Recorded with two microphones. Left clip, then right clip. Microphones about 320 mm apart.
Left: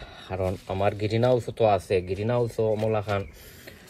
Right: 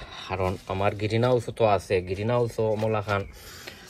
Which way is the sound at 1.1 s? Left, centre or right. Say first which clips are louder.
Even; centre.